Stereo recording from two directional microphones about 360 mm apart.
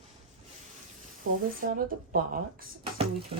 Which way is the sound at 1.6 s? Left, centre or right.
Right.